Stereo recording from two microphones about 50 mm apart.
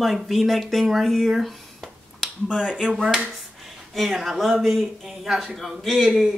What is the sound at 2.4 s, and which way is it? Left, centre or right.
Speech, centre.